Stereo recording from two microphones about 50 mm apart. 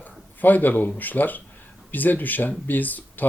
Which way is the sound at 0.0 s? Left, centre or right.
Left.